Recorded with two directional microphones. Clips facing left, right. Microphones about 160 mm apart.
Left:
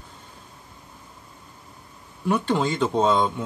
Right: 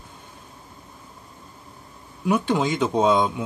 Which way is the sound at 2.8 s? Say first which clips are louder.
Right 2 dB; 15° right (ahead or behind).